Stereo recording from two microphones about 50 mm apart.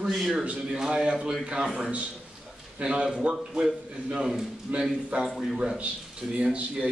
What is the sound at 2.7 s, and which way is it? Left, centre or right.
Speech, centre.